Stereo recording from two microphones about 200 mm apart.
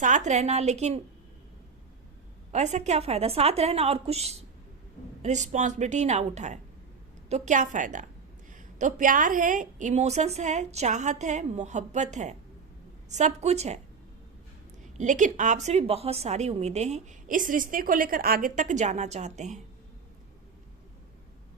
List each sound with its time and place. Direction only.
0.0 s a woman's voice: 35° right (ahead or behind)
2.5 s a woman's voice: 35° right (ahead or behind)
14.9 s a woman's voice: 40° right (ahead or behind)